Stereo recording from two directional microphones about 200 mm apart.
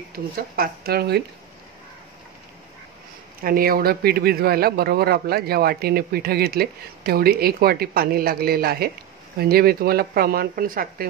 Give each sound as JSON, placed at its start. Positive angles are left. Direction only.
{"t": 0.1, "sound": "a man's voice", "side_deg": -50}
{"t": 3.4, "sound": "a man's voice", "side_deg": -45}